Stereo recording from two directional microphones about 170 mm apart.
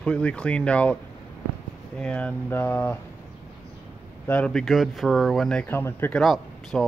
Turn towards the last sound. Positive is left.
turn(degrees=0)  # may be behind; listen again after turning